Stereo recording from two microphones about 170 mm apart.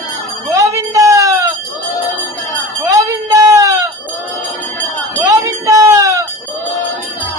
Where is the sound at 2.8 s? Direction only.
15° right (ahead or behind).